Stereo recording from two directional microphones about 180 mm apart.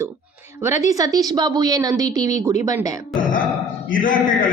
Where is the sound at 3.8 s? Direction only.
50° left (ahead or behind).